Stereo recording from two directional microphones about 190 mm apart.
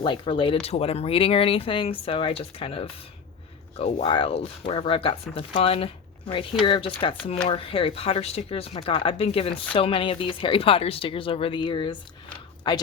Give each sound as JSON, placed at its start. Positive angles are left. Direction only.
{"t": 0.0, "sound": "speech", "side_deg": 25}